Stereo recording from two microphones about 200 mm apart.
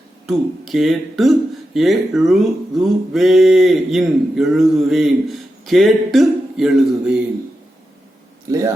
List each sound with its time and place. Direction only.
0.3 s speech: centre (ahead or behind)
8.4 s speech: 15° right (ahead or behind)